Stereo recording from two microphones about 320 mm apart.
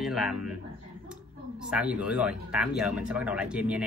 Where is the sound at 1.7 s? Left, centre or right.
Centre.